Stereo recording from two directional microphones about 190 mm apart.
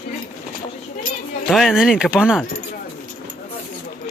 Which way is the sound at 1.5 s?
Centre (ahead or behind).